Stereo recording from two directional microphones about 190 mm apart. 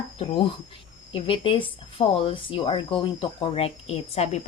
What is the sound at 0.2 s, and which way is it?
Speech, 25° left (ahead or behind).